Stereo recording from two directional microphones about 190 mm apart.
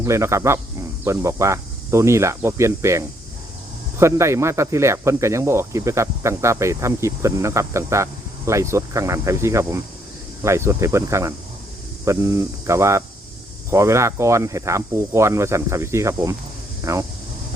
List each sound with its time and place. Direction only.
0.0 s speech: 15° right (ahead or behind)